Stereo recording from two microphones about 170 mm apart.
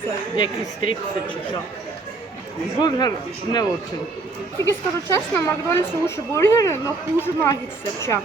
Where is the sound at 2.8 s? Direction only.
25° left (ahead or behind).